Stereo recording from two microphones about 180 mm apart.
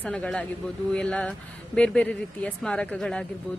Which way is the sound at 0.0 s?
5° left (ahead or behind).